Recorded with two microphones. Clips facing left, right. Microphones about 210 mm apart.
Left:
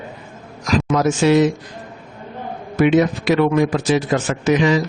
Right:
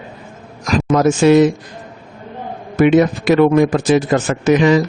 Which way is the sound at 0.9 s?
50° right (ahead or behind).